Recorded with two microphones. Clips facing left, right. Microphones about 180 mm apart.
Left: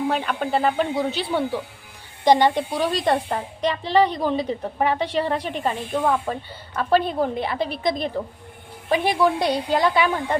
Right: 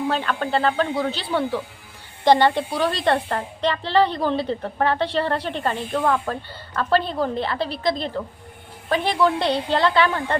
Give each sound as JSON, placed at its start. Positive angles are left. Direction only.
{"t": 0.1, "sound": "a woman's voice", "side_deg": 10}